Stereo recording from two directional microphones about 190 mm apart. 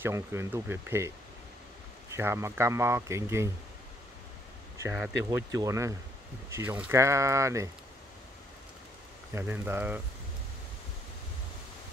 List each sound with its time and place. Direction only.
0.0 s speech: 15° right (ahead or behind)
2.1 s speech: 15° right (ahead or behind)
4.8 s speech: 5° right (ahead or behind)
5.3 s speech: 15° right (ahead or behind)
9.3 s speech: 10° right (ahead or behind)